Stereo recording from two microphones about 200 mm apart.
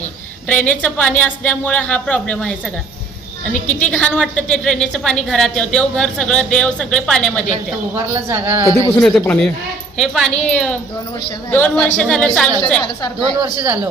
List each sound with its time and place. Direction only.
0.4 s a woman's voice: 5° left (ahead or behind)
7.9 s a woman's voice: 15° right (ahead or behind)
9.0 s a woman's voice: 5° left (ahead or behind)
13.4 s speech: 20° right (ahead or behind)